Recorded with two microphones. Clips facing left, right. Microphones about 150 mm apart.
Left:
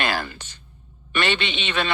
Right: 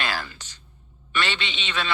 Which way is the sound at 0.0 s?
55° left (ahead or behind).